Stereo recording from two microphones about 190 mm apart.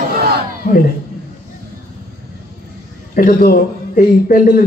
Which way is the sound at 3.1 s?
50° left (ahead or behind).